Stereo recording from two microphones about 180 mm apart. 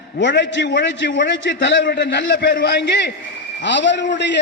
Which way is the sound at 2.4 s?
55° left (ahead or behind).